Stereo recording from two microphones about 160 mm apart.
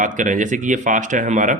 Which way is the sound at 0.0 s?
55° right (ahead or behind).